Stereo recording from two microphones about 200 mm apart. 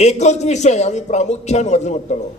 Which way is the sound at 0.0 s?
35° left (ahead or behind).